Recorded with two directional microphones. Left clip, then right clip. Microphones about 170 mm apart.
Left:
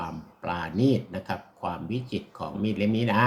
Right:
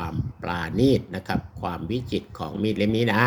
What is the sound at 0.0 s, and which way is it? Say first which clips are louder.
Speech: right 2 dB; 45° right (ahead or behind).